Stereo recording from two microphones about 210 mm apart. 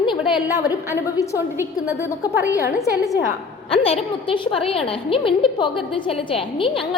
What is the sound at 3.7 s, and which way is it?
A woman's voice, 25° left (ahead or behind).